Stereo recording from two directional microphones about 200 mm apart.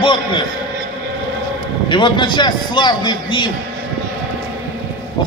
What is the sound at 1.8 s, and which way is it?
A man's voice, 25° left (ahead or behind).